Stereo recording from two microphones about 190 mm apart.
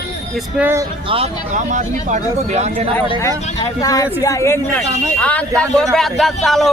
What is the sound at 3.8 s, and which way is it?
A man's voice, 20° left (ahead or behind).